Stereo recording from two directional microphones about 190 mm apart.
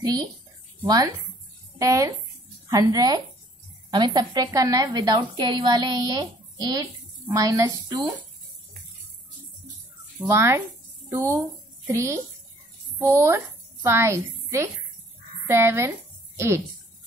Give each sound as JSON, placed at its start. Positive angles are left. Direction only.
{"t": 0.0, "sound": "a woman's voice", "side_deg": -20}
{"t": 10.1, "sound": "speech", "side_deg": -15}
{"t": 13.8, "sound": "a woman's voice", "side_deg": -15}